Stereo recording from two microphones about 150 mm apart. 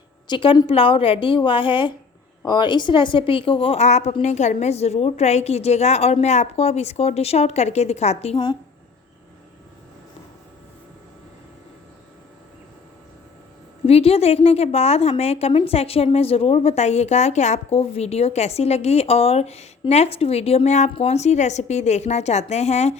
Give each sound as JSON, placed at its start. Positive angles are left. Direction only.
{"t": 0.3, "sound": "a woman's voice", "side_deg": 35}
{"t": 13.8, "sound": "a woman's voice", "side_deg": 40}